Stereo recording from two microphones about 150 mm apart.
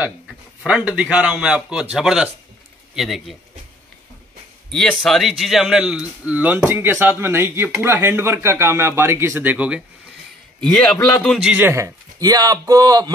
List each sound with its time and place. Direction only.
0.7 s speech: 5° right (ahead or behind)
4.6 s speech: 5° left (ahead or behind)
10.6 s speech: 5° left (ahead or behind)
11.4 s speech: 10° right (ahead or behind)